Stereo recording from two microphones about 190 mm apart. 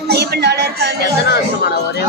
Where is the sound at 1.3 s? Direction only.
60° left (ahead or behind).